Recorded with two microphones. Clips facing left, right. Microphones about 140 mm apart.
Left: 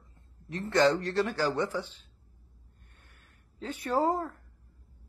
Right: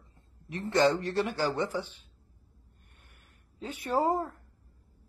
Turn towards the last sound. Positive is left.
turn(degrees=-20)  # may be behind; listen again after turning